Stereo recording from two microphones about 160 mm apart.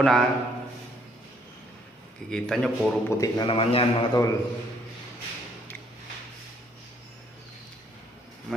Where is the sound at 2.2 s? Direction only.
5° left (ahead or behind).